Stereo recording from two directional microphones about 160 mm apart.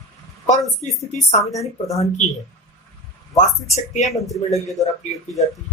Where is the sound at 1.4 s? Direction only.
20° left (ahead or behind).